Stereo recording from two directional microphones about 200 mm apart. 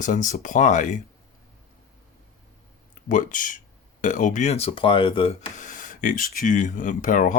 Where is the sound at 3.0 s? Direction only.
40° left (ahead or behind).